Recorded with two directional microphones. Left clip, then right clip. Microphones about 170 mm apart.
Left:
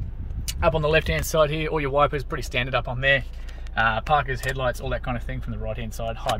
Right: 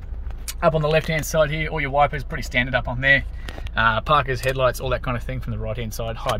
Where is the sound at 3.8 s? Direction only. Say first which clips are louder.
Right 3 dB; 40° right (ahead or behind).